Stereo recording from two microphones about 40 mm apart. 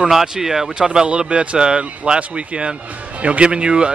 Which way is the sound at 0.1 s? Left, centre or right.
Centre.